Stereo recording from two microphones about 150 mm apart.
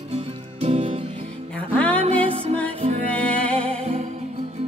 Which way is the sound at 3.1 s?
10° left (ahead or behind).